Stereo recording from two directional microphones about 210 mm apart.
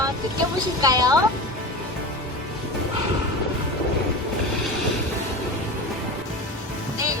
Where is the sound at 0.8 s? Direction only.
15° right (ahead or behind).